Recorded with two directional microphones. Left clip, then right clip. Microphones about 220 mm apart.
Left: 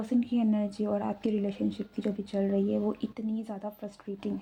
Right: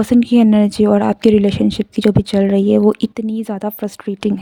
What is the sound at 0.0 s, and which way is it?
Speech, 55° right (ahead or behind).